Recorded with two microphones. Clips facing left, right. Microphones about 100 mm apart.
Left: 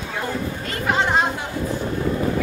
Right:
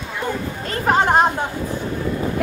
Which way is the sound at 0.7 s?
45° right (ahead or behind).